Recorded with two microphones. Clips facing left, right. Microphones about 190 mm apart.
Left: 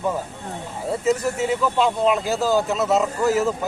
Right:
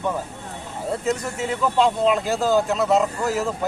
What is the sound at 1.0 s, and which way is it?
Speech, centre (ahead or behind).